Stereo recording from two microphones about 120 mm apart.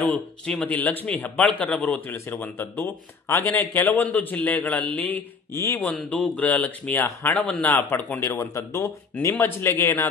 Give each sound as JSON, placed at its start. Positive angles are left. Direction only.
{"t": 0.0, "sound": "a man's voice", "side_deg": 5}
{"t": 7.3, "sound": "a man's voice", "side_deg": 5}
{"t": 7.7, "sound": "speech", "side_deg": 15}